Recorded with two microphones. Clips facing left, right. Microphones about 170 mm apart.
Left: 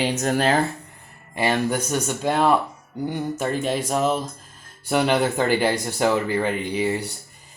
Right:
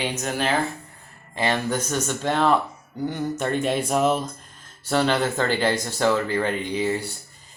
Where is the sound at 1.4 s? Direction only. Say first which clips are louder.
Left 2 dB; 10° left (ahead or behind).